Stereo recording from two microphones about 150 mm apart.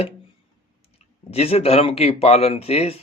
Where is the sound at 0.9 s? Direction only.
45° left (ahead or behind).